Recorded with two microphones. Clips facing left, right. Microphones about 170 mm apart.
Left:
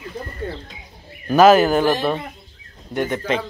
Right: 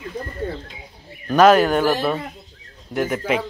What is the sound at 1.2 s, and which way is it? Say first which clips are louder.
Speech: left 1 dB; centre (ahead or behind).